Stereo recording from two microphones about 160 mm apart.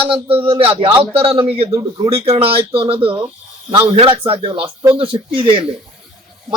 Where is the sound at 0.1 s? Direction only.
35° right (ahead or behind).